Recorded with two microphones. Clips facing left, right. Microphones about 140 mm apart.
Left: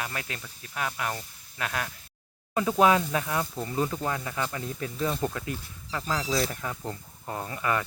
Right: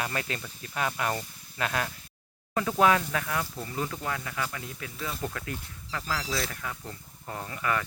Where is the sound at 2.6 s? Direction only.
20° left (ahead or behind).